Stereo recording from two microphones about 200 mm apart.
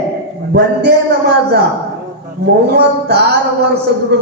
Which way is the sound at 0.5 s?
55° right (ahead or behind).